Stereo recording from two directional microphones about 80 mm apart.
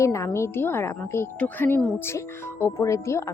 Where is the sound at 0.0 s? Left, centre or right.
Left.